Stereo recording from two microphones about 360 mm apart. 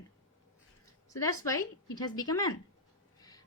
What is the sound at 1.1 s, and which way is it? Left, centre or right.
A woman's voice, centre.